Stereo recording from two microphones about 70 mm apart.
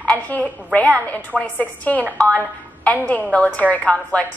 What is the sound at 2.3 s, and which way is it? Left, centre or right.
A woman's voice, left.